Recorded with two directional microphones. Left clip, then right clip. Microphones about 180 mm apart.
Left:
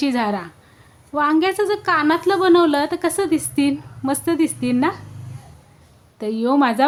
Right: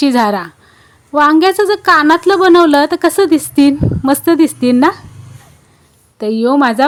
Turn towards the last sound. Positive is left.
turn(degrees=-35)  # may be behind; listen again after turning